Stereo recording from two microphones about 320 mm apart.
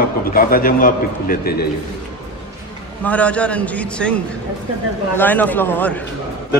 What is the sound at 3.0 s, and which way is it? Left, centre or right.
A man's voice, centre.